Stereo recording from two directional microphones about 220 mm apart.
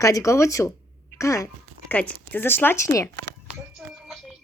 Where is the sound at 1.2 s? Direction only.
15° left (ahead or behind).